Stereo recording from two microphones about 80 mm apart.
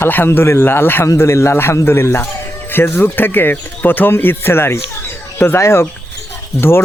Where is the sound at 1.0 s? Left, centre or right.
Left.